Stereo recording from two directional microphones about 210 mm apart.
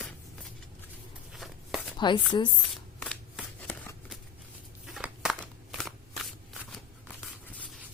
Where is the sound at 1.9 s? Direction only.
20° left (ahead or behind).